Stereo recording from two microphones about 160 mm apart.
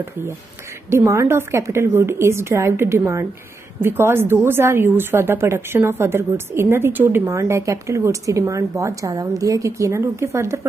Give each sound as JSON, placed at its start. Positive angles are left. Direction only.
{"t": 0.8, "sound": "a woman's voice", "side_deg": -20}